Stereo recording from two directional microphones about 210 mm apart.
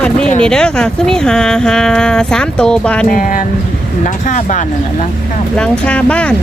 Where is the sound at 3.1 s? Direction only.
40° left (ahead or behind).